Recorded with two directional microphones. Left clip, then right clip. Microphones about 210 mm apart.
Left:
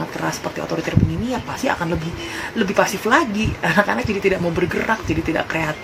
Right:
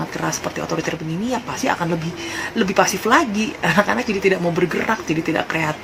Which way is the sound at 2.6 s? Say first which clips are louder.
Right 1 dB; 15° right (ahead or behind).